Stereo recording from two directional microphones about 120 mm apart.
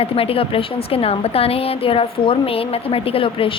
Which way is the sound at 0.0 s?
50° left (ahead or behind).